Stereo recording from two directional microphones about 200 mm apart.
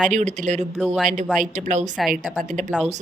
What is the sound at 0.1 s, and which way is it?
A woman's voice, 35° right (ahead or behind).